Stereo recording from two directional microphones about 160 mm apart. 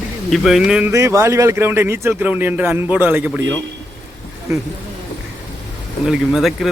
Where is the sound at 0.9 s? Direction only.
20° right (ahead or behind).